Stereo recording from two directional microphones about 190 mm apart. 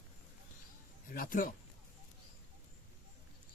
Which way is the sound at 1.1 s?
45° left (ahead or behind).